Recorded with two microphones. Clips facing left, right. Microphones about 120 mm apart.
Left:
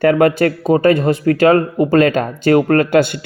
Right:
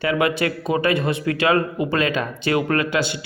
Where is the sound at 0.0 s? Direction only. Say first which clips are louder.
Left 8 dB; 50° left (ahead or behind).